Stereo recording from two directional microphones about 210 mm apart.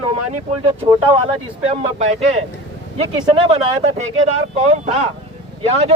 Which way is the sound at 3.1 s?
25° right (ahead or behind).